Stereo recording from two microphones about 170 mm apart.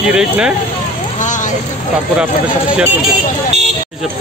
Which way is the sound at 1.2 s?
45° left (ahead or behind).